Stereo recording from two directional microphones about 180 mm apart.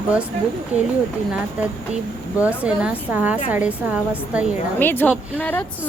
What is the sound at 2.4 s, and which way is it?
Speech, 10° right (ahead or behind).